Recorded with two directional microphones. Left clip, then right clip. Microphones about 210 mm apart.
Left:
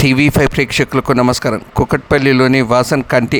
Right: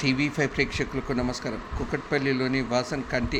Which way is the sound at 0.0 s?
55° left (ahead or behind).